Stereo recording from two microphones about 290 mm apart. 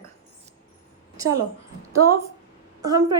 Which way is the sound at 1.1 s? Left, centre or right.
Centre.